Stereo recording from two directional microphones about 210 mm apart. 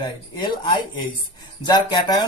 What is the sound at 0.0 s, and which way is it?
Speech, 20° left (ahead or behind).